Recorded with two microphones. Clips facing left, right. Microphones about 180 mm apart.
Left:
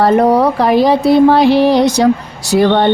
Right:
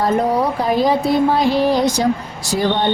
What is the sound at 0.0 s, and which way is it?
Speech, 70° left (ahead or behind).